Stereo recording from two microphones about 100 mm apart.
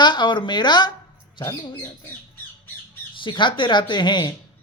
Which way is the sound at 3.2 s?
55° left (ahead or behind).